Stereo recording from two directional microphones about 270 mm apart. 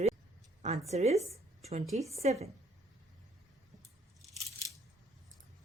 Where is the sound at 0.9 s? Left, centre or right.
Right.